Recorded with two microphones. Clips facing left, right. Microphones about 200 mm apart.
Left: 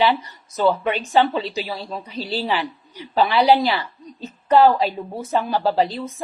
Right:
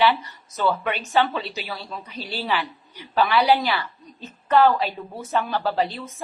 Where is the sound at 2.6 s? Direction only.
15° left (ahead or behind).